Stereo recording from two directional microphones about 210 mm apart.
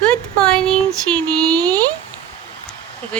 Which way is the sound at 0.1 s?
5° left (ahead or behind).